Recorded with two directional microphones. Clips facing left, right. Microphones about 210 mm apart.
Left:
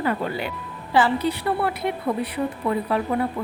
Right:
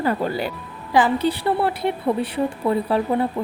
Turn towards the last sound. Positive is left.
turn(degrees=-30)  # may be behind; listen again after turning